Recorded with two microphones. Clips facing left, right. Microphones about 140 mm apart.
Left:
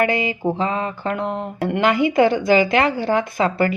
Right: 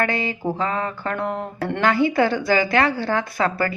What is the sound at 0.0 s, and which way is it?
A woman's voice, 15° left (ahead or behind).